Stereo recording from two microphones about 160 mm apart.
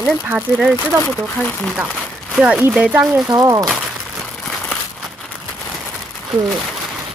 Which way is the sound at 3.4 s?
25° right (ahead or behind).